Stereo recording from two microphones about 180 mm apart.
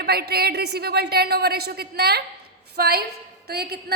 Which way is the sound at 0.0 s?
60° right (ahead or behind).